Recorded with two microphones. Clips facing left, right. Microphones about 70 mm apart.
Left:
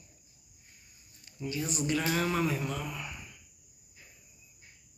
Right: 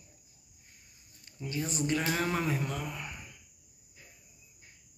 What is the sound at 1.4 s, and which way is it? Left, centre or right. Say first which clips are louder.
Speech: even; right.